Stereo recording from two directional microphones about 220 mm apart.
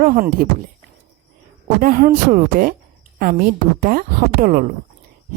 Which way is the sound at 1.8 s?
40° right (ahead or behind).